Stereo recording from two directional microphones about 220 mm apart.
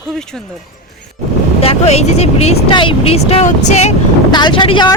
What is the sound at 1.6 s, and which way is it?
Speech, 25° left (ahead or behind).